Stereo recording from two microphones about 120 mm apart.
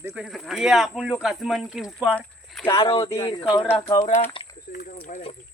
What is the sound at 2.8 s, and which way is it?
Speech, 45° left (ahead or behind).